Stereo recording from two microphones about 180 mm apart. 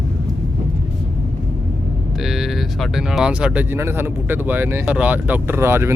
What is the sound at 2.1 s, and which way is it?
Speech, centre (ahead or behind).